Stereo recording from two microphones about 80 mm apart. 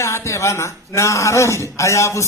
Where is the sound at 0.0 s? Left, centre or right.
Left.